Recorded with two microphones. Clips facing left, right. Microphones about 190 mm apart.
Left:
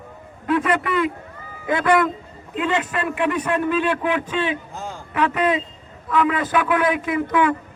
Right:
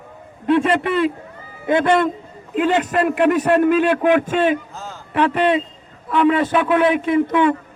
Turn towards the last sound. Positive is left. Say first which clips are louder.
# right 4 dB
turn(degrees=-25)  # may be behind; listen again after turning